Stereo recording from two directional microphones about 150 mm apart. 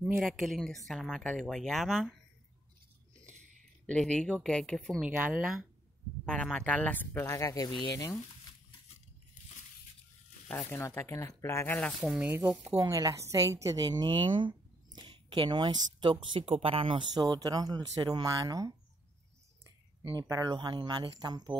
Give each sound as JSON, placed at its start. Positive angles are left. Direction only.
{"t": 0.0, "sound": "speech", "side_deg": 0}
{"t": 3.8, "sound": "speech", "side_deg": 5}
{"t": 5.0, "sound": "speech", "side_deg": -10}
{"t": 6.2, "sound": "speech", "side_deg": 5}
{"t": 10.5, "sound": "speech", "side_deg": 15}
{"t": 12.0, "sound": "a woman's voice", "side_deg": -10}
{"t": 20.0, "sound": "speech", "side_deg": -35}
{"t": 20.2, "sound": "a woman's voice", "side_deg": -25}